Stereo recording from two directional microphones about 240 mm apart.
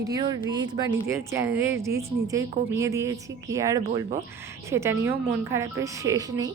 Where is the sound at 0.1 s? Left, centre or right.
Centre.